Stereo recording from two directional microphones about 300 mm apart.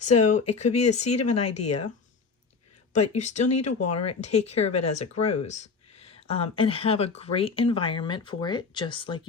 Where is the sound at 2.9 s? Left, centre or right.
Left.